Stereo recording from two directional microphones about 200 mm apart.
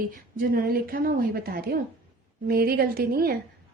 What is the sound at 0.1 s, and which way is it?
A woman's voice, 45° right (ahead or behind).